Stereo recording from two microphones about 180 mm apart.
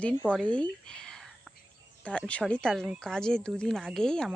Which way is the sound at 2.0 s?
5° left (ahead or behind).